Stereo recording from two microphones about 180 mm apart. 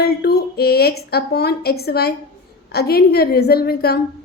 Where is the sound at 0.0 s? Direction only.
65° left (ahead or behind).